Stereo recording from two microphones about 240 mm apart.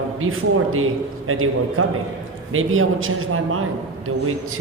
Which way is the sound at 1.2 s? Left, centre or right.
Right.